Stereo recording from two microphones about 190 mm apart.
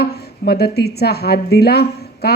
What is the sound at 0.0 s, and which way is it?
A woman's voice, 55° left (ahead or behind).